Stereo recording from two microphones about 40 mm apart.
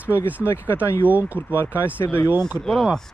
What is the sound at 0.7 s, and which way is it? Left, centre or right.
Speech, right.